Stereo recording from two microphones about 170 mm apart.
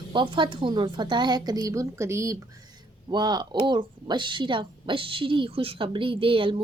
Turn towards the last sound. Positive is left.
turn(degrees=-30)  # may be behind; listen again after turning